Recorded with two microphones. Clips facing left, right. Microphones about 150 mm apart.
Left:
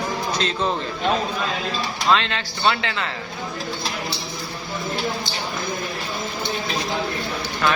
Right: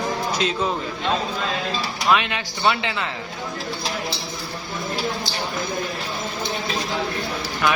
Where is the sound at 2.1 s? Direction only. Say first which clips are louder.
Even; 15° right (ahead or behind).